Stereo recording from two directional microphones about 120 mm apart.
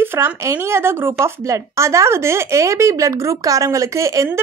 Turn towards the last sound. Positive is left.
turn(degrees=-25)  # may be behind; listen again after turning